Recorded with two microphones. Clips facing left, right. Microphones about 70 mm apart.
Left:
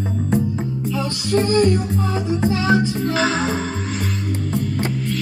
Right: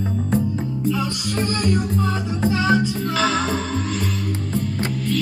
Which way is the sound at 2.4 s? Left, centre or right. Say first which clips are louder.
Even; left.